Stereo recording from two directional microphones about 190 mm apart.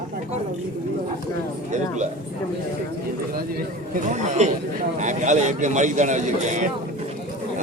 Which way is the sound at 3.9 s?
40° right (ahead or behind).